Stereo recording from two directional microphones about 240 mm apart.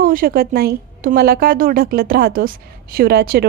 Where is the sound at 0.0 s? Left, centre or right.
Right.